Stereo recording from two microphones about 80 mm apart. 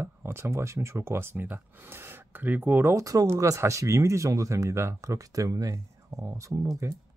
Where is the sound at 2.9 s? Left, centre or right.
Right.